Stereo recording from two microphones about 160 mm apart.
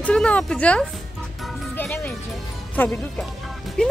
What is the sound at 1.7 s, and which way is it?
Music, 10° left (ahead or behind).